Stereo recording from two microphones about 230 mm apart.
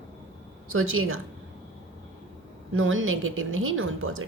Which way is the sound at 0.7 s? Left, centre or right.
Right.